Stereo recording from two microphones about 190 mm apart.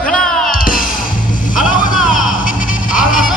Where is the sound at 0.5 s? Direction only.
45° left (ahead or behind).